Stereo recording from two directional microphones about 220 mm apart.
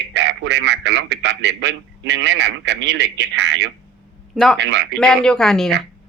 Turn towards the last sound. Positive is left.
turn(degrees=0)  # may be behind; listen again after turning